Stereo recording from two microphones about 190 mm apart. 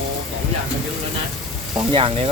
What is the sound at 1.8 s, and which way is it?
Speech, 30° right (ahead or behind).